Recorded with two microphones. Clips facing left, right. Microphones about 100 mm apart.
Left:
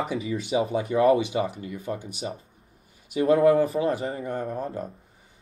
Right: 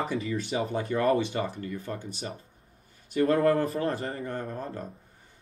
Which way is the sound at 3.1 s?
10° left (ahead or behind).